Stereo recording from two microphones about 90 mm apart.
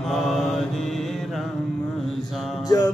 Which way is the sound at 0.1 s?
Centre (ahead or behind).